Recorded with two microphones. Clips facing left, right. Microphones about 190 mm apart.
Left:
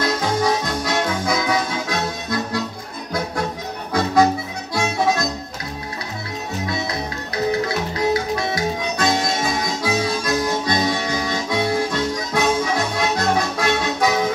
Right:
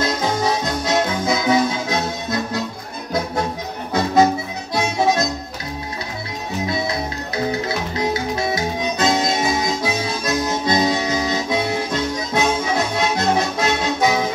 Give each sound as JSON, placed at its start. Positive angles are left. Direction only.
{"t": 0.0, "sound": "music", "side_deg": -25}
{"t": 3.9, "sound": "music", "side_deg": -25}
{"t": 7.6, "sound": "music", "side_deg": -25}
{"t": 8.9, "sound": "harmonica", "side_deg": -25}